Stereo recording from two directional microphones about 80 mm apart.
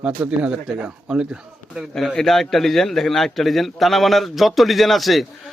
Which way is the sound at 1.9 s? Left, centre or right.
Centre.